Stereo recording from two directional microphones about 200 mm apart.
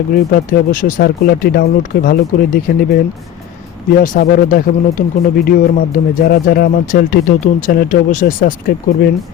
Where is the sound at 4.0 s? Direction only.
45° left (ahead or behind).